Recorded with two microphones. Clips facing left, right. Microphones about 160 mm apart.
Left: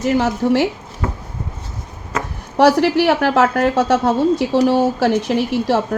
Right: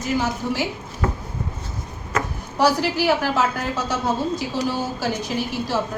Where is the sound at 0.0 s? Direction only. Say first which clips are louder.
Left 7 dB; 70° left (ahead or behind).